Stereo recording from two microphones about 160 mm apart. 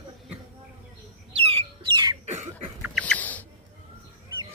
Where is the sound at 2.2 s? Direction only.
45° right (ahead or behind).